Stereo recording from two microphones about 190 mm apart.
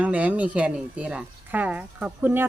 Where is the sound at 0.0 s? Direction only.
5° right (ahead or behind).